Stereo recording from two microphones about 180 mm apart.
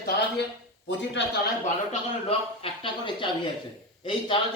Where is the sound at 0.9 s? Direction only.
75° left (ahead or behind).